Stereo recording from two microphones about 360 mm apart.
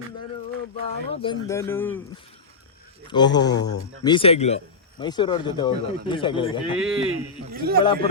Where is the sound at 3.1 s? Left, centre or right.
Centre.